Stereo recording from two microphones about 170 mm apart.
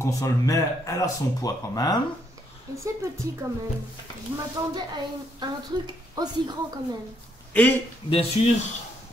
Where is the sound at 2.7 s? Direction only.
20° right (ahead or behind).